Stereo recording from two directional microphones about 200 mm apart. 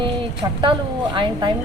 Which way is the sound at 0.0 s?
25° right (ahead or behind).